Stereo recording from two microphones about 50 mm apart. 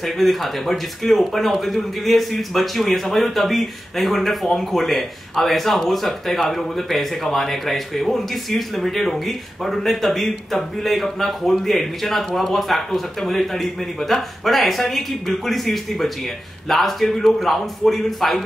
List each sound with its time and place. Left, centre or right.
0.0 s speech: centre